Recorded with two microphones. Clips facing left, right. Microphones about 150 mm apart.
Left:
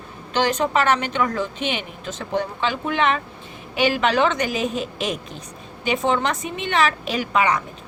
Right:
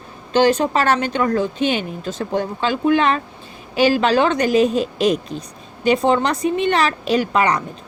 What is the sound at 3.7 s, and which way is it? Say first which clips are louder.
Speech: right 4 dB; 35° right (ahead or behind).